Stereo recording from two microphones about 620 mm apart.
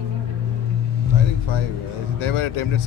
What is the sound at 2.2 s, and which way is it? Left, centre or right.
Speech, left.